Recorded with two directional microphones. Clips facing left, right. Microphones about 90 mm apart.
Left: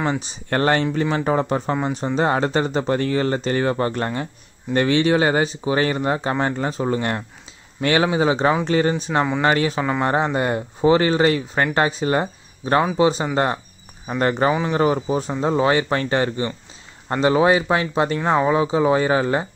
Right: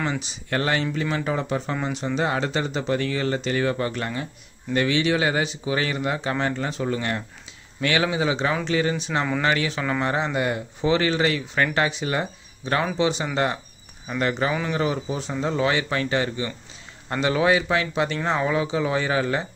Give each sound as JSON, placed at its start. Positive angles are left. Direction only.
{"t": 0.5, "sound": "speech", "side_deg": 40}
{"t": 9.8, "sound": "speech", "side_deg": 25}
{"t": 10.0, "sound": "speech", "side_deg": 40}
{"t": 14.8, "sound": "speech", "side_deg": 45}
{"t": 17.1, "sound": "speech", "side_deg": 30}